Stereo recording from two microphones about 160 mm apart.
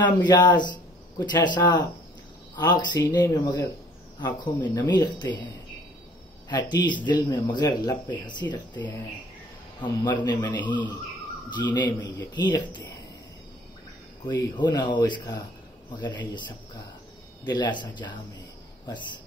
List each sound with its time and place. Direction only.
0.0 s speech: 25° left (ahead or behind)
6.5 s speech: 25° left (ahead or behind)
10.2 s speech: 30° left (ahead or behind)
14.2 s speech: 25° left (ahead or behind)